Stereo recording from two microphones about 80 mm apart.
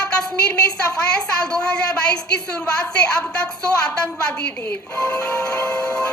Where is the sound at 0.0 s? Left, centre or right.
Centre.